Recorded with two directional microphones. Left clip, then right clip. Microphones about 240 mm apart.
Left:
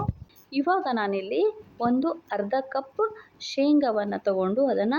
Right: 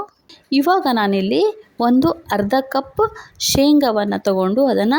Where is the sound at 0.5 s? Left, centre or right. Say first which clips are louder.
Right 9 dB; right.